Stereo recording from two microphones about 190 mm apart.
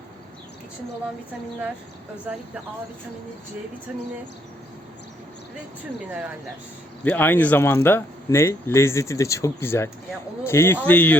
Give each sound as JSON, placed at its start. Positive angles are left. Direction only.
{"t": 7.0, "sound": "speech", "side_deg": 10}